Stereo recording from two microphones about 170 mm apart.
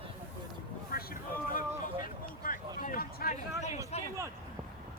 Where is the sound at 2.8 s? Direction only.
60° left (ahead or behind).